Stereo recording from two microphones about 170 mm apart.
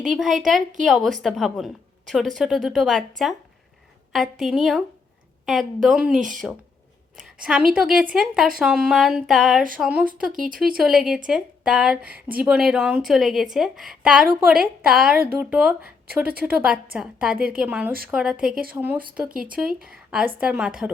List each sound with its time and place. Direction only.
0.0 s a woman's voice: centre (ahead or behind)
10.3 s speech: 50° right (ahead or behind)
10.8 s a woman's voice: 5° right (ahead or behind)